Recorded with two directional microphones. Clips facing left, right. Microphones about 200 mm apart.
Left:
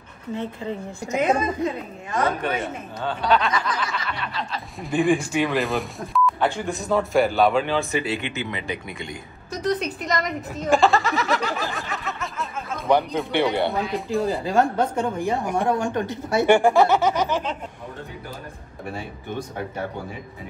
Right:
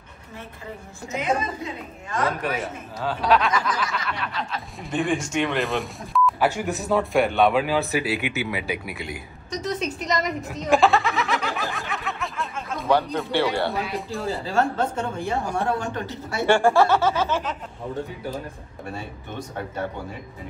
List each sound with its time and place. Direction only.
2.1 s speech: centre (ahead or behind)
12.8 s speech: 15° left (ahead or behind)